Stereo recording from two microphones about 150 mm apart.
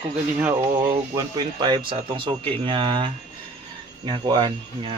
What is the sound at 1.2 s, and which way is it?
Speech, 30° right (ahead or behind).